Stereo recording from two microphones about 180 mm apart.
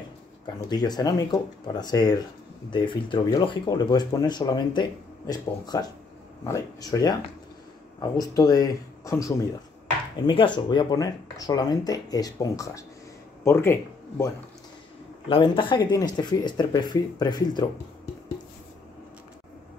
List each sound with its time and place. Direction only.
0.7 s speech: 20° left (ahead or behind)
15.2 s speech: 30° left (ahead or behind)